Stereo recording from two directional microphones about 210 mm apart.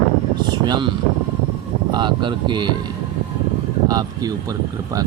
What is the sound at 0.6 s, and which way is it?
Speech, 20° right (ahead or behind).